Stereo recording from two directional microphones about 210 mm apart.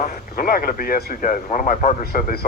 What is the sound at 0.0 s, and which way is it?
Speech, 45° left (ahead or behind).